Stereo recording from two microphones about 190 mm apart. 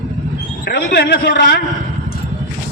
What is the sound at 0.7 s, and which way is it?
Speech, 60° left (ahead or behind).